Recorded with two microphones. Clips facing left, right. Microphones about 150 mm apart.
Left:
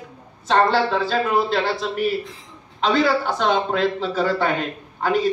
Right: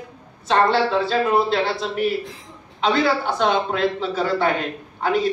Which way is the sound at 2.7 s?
40° left (ahead or behind).